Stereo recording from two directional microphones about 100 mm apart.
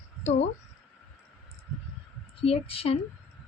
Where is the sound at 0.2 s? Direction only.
90° left.